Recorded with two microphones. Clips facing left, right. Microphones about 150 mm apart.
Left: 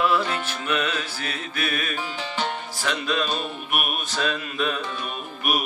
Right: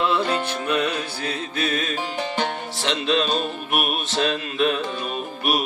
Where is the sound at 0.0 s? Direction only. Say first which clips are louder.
Right 1 dB; 20° right (ahead or behind).